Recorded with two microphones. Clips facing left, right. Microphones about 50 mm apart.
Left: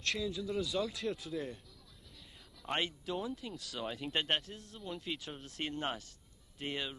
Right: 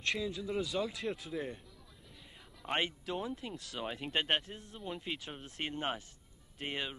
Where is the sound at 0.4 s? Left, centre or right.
Right.